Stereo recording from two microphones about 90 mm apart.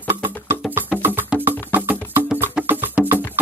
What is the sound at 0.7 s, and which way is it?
Music, 25° right (ahead or behind).